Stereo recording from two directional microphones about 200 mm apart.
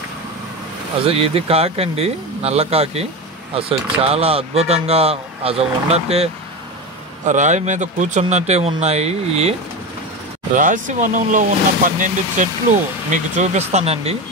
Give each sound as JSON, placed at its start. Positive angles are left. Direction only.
{"t": 1.0, "sound": "speech", "side_deg": -30}